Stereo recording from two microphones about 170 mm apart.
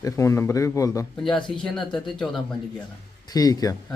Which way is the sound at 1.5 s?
5° left (ahead or behind).